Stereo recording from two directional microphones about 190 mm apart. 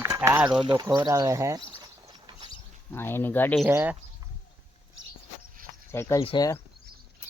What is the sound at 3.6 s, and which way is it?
Speech, 10° right (ahead or behind).